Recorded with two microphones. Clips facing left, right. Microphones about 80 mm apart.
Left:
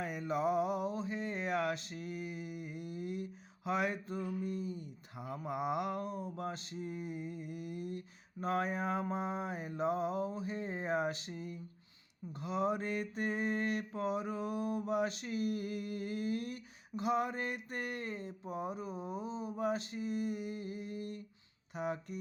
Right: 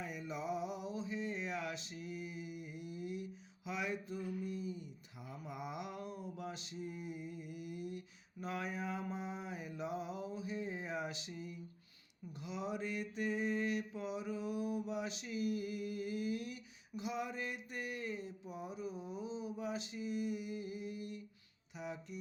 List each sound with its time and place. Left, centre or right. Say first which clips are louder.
0.0 s music: left 8 dB; left
3.7 s mantra: left 6 dB; left